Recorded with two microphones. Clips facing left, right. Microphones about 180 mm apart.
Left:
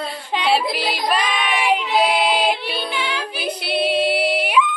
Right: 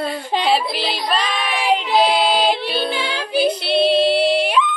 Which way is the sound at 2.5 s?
30° right (ahead or behind).